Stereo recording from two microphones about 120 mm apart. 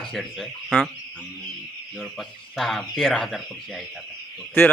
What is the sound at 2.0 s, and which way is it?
Speech, centre (ahead or behind).